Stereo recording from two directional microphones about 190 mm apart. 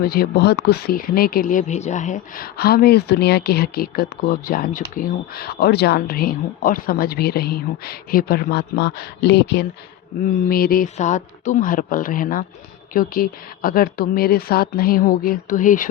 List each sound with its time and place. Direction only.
0.0 s speech: 50° left (ahead or behind)
10.5 s speech: 50° left (ahead or behind)